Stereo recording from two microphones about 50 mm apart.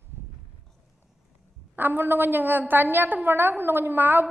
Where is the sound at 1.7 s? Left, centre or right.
Right.